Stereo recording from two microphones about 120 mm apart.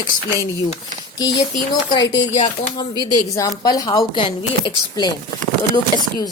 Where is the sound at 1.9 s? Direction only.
35° left (ahead or behind).